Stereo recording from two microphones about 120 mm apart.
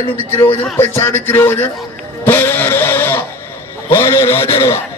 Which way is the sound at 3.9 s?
20° left (ahead or behind).